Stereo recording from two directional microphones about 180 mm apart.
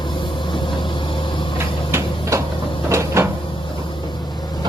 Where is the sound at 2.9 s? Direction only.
15° right (ahead or behind).